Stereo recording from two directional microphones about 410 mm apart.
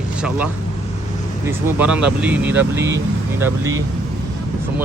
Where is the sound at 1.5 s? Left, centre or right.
Centre.